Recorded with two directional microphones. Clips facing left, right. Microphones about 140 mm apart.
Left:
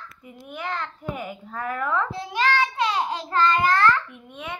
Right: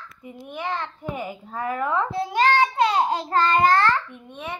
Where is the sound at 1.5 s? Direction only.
15° right (ahead or behind).